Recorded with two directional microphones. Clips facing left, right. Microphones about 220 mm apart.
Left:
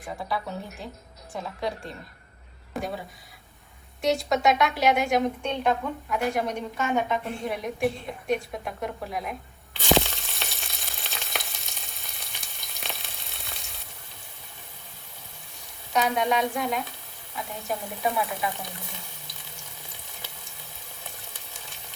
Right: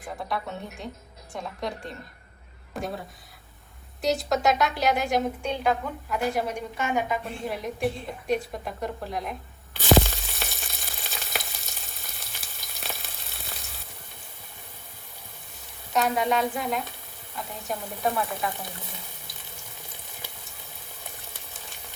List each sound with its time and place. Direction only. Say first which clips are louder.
0.0 s a woman's voice: even; centre (ahead or behind)
4.0 s a woman's voice: left 1 dB; centre (ahead or behind)
9.8 s frying: right 3 dB; centre (ahead or behind)
15.9 s a woman's voice: even; centre (ahead or behind)